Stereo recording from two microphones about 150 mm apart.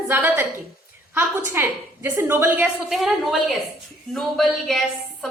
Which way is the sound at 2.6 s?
Centre (ahead or behind).